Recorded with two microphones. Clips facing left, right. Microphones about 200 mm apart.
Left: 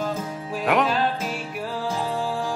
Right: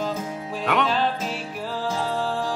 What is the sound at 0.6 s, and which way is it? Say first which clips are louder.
Music: left 2 dB; 5° left (ahead or behind).